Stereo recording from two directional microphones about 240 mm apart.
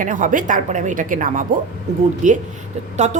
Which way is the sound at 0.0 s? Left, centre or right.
Right.